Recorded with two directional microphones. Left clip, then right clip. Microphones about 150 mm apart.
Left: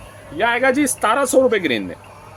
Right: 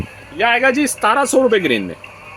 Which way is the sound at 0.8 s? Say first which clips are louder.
Right 2 dB; 70° right (ahead or behind).